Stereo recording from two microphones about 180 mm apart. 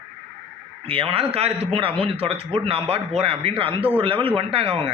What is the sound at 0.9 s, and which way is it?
A man's voice, 30° right (ahead or behind).